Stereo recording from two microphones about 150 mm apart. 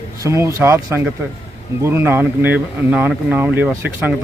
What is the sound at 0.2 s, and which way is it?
Speech, 20° right (ahead or behind).